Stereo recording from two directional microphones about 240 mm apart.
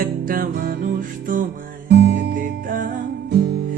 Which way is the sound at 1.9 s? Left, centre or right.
Right.